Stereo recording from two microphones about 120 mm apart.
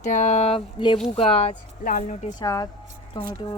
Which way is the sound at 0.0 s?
85° left.